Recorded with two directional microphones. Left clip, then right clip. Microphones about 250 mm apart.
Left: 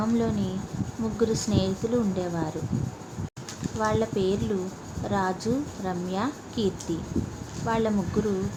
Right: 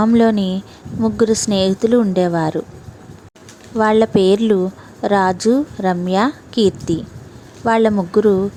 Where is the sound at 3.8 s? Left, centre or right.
Right.